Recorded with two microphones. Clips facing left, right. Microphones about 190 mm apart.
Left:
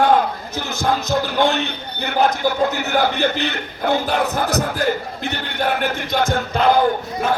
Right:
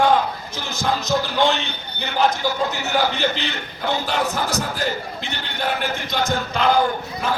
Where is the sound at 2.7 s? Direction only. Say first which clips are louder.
Left 3 dB; 60° left (ahead or behind).